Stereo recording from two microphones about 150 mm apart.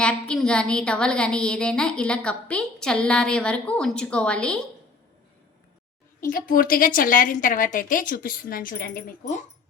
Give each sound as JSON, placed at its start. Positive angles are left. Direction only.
{"t": 0.0, "sound": "a woman's voice", "side_deg": 5}
{"t": 6.1, "sound": "a woman's voice", "side_deg": 65}